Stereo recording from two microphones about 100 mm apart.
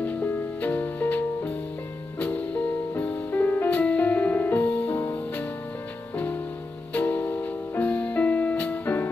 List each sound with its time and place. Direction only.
0.0 s music: 15° left (ahead or behind)